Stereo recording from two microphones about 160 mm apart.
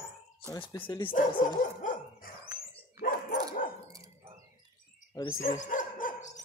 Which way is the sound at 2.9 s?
65° left (ahead or behind).